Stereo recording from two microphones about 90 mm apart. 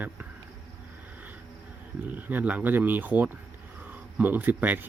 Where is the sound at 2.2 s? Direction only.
20° right (ahead or behind).